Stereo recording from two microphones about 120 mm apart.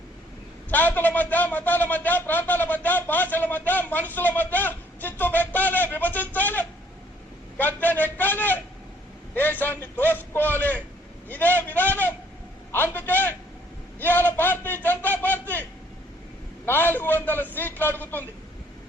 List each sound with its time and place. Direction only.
0.7 s a man's voice: 15° left (ahead or behind)
16.6 s a man's voice: 15° left (ahead or behind)